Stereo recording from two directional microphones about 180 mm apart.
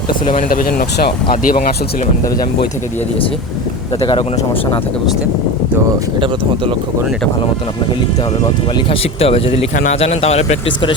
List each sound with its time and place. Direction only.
0.3 s speech: 50° left (ahead or behind)
6.1 s speech: 25° right (ahead or behind)
8.9 s a man's voice: 30° left (ahead or behind)